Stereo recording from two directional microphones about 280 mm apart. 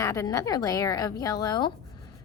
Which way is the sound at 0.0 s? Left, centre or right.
Centre.